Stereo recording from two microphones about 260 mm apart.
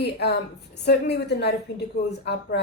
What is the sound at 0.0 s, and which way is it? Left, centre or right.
A woman's voice, left.